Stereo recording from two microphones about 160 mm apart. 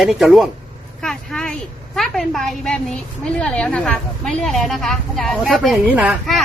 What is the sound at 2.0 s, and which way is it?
A woman's voice, 5° left (ahead or behind).